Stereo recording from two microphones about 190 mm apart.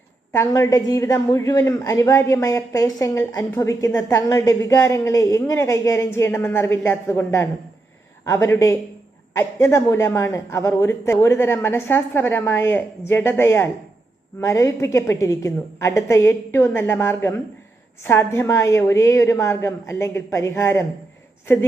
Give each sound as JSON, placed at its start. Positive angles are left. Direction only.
{"t": 0.3, "sound": "a woman's voice", "side_deg": 15}